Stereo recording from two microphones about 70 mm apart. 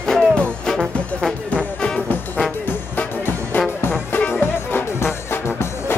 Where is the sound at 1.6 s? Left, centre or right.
Centre.